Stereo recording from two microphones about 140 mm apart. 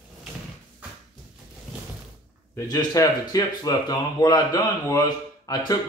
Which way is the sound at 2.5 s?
25° left (ahead or behind).